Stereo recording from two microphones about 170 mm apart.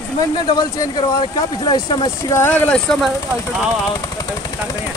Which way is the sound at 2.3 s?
10° left (ahead or behind).